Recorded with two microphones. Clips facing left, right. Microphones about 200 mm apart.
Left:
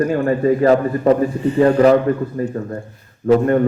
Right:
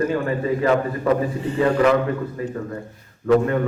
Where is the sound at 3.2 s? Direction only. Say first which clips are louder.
Left 4 dB; 40° left (ahead or behind).